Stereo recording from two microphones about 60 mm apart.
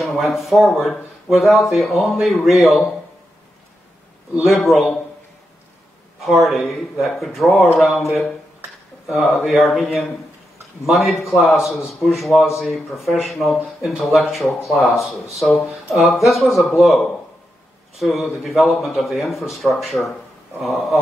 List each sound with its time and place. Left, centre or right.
0.0 s speech: centre
4.4 s speech: centre
6.2 s speech: centre
9.1 s speech: centre
10.9 s speech: centre